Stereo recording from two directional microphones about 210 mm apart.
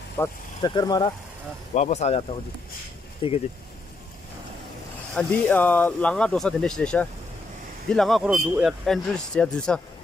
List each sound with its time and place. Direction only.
0.2 s speech: 20° left (ahead or behind)
1.7 s speech: 35° left (ahead or behind)
5.1 s speech: 10° left (ahead or behind)